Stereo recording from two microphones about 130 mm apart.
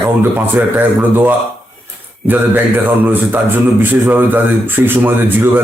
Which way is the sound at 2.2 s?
15° right (ahead or behind).